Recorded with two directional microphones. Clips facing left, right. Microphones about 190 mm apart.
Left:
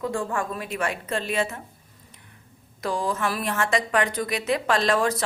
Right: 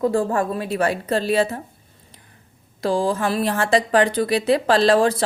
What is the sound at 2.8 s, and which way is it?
A woman's voice, 30° right (ahead or behind).